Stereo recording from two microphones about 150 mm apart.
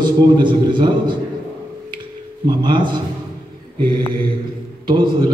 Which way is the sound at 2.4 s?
30° right (ahead or behind).